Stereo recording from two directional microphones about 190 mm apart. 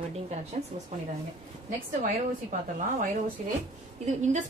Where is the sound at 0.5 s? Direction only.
40° right (ahead or behind).